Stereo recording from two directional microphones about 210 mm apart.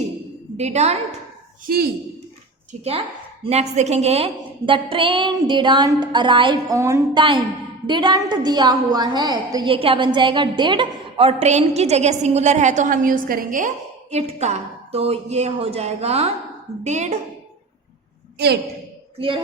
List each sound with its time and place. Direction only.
0.5 s a woman's voice: 30° right (ahead or behind)
1.6 s speech: 45° right (ahead or behind)
2.7 s a woman's voice: 30° right (ahead or behind)
14.1 s a woman's voice: 30° right (ahead or behind)
18.3 s a woman's voice: 50° right (ahead or behind)